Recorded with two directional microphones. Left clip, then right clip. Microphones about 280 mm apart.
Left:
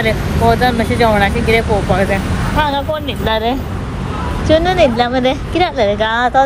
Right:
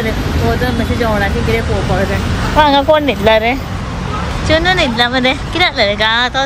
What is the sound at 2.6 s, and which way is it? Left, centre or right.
Speech, right.